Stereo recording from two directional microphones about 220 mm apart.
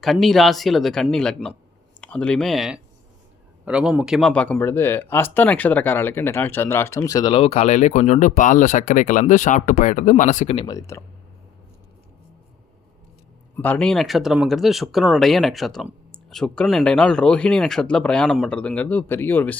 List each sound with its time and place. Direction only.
0.0 s speech: centre (ahead or behind)
13.6 s speech: 5° left (ahead or behind)